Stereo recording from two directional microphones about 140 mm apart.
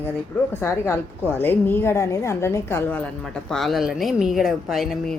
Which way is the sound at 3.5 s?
Centre (ahead or behind).